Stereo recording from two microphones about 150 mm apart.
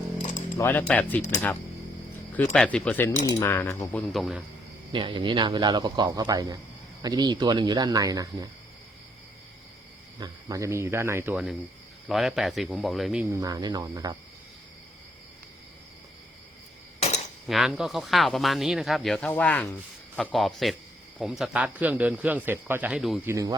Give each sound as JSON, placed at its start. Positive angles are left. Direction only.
{"t": 0.2, "sound": "a sound", "side_deg": 55}
{"t": 0.5, "sound": "speech", "side_deg": 15}
{"t": 2.3, "sound": "speech", "side_deg": 10}
{"t": 3.9, "sound": "speech", "side_deg": 0}
{"t": 4.9, "sound": "a man's voice", "side_deg": -30}
{"t": 10.2, "sound": "speech", "side_deg": -25}
{"t": 12.0, "sound": "speech", "side_deg": 0}
{"t": 13.4, "sound": "a man's voice", "side_deg": -25}
{"t": 17.4, "sound": "speech", "side_deg": 0}
{"t": 23.2, "sound": "a man's voice", "side_deg": -20}